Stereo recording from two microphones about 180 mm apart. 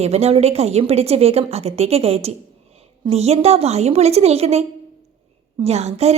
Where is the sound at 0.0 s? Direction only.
35° right (ahead or behind).